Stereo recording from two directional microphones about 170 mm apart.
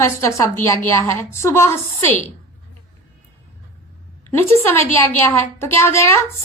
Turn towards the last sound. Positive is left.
turn(degrees=15)  # may be behind; listen again after turning